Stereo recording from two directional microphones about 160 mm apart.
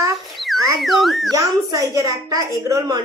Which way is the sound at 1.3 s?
20° right (ahead or behind).